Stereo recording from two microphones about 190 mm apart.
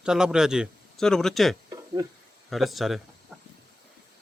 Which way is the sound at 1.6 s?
20° right (ahead or behind).